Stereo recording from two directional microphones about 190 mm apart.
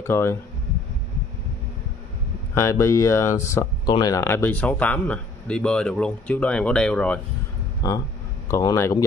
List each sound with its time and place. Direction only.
0.0 s speech: 15° left (ahead or behind)
2.5 s speech: 15° left (ahead or behind)
7.8 s speech: 20° left (ahead or behind)